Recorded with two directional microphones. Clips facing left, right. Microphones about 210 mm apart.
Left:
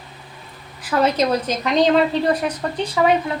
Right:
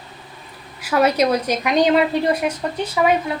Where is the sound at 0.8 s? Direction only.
10° right (ahead or behind).